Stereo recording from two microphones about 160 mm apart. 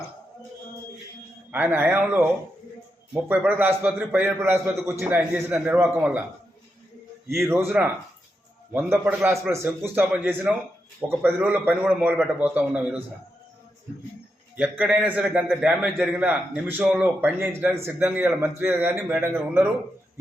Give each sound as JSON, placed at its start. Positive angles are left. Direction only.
{"t": 1.5, "sound": "a man's voice", "side_deg": -10}
{"t": 7.3, "sound": "a man's voice", "side_deg": -15}
{"t": 14.5, "sound": "a man's voice", "side_deg": -10}